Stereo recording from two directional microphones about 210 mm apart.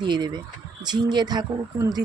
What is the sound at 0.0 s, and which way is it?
A woman's voice, 20° right (ahead or behind).